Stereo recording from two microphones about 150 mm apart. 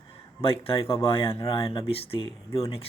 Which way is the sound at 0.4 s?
40° left (ahead or behind).